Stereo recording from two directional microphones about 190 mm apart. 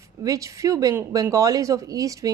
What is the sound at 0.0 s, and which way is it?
Speech, 15° right (ahead or behind).